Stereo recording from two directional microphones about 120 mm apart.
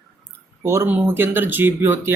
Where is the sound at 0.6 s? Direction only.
20° right (ahead or behind).